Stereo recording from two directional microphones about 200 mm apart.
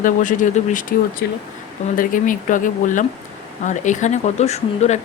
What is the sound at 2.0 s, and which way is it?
Speech, 40° left (ahead or behind).